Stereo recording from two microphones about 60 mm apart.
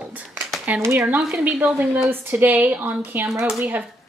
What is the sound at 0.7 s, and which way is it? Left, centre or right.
Speech, right.